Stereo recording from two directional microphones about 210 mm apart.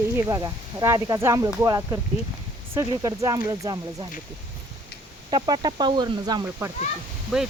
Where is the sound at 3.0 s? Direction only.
15° right (ahead or behind).